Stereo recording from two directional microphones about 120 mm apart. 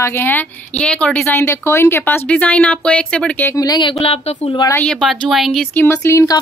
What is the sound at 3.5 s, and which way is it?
Speech, 35° left (ahead or behind).